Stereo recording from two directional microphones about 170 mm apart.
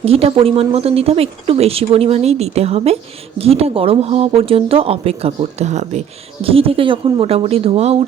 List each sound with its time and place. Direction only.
0.0 s speech: 35° right (ahead or behind)